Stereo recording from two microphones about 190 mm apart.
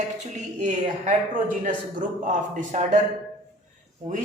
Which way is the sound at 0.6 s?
40° right (ahead or behind).